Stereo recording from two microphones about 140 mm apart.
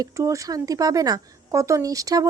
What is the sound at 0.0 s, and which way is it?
A woman's voice, 25° right (ahead or behind).